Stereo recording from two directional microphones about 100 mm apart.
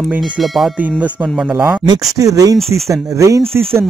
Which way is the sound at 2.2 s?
35° right (ahead or behind).